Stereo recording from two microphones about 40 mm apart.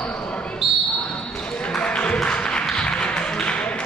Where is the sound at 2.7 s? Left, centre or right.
Left.